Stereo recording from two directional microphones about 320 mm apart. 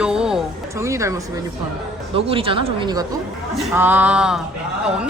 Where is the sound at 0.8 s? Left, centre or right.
Centre.